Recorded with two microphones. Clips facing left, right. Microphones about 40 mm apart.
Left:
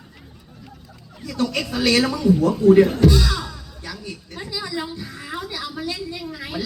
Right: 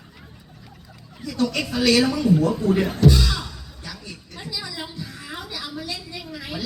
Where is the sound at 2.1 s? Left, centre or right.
Centre.